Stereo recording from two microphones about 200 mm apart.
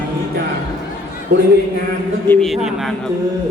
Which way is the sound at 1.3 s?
55° right (ahead or behind).